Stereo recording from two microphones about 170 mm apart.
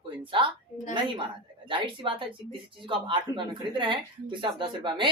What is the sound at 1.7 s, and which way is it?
Speech, 30° right (ahead or behind).